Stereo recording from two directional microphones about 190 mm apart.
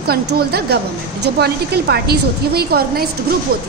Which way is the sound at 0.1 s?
55° right (ahead or behind).